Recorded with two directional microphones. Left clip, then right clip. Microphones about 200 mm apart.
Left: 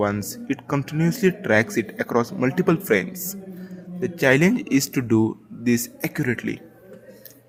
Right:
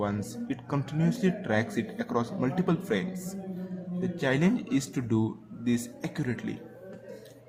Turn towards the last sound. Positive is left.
turn(degrees=30)  # may be behind; listen again after turning